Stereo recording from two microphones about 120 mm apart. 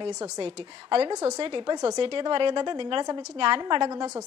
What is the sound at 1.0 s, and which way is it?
Speech, 30° right (ahead or behind).